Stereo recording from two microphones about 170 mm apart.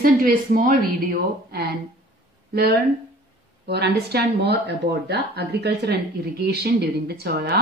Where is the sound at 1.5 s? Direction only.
65° right (ahead or behind).